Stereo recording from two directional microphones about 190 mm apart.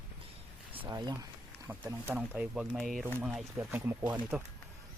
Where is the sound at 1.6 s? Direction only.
10° right (ahead or behind).